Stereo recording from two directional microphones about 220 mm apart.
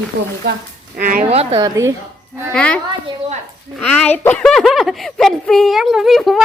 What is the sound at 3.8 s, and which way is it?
A woman's voice, 5° left (ahead or behind).